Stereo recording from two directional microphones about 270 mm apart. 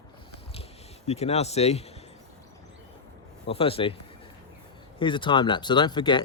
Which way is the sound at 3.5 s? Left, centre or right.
Left.